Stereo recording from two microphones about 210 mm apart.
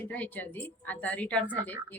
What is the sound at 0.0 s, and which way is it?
A woman's voice, 10° left (ahead or behind).